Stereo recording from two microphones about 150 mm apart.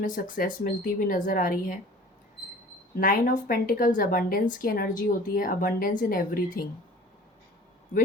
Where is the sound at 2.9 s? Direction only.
65° left (ahead or behind).